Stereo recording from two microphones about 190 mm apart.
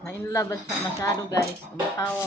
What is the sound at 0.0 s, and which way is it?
Speech, 15° left (ahead or behind).